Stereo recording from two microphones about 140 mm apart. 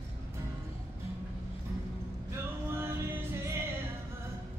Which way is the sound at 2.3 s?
20° right (ahead or behind).